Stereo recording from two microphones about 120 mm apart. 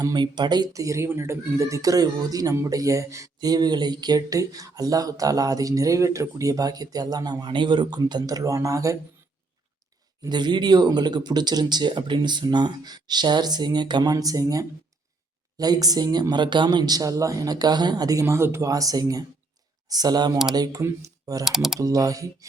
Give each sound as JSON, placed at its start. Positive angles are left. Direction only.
{"t": 0.0, "sound": "speech", "side_deg": -35}
{"t": 10.2, "sound": "speech", "side_deg": -40}
{"t": 21.4, "sound": "speech", "side_deg": -5}
{"t": 21.8, "sound": "speech", "side_deg": -30}